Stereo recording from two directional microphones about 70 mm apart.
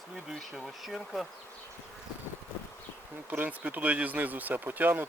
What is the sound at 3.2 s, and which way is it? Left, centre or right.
Speech, right.